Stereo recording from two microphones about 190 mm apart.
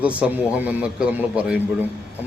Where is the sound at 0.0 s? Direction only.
5° right (ahead or behind).